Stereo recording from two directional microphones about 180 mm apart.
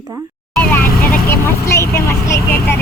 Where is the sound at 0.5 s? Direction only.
10° left (ahead or behind).